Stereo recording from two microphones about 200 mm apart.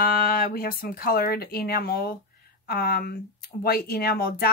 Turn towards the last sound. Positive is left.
turn(degrees=50)  # may be behind; listen again after turning